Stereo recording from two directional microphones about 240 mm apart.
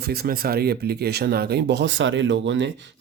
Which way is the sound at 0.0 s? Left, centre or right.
Right.